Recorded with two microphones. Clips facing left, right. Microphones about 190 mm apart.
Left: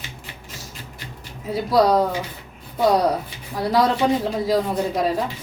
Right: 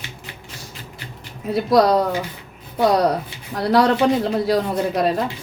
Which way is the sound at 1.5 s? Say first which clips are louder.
Right 2 dB; 70° right (ahead or behind).